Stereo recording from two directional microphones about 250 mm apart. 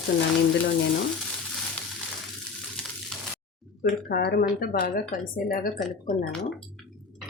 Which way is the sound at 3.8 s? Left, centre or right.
Left.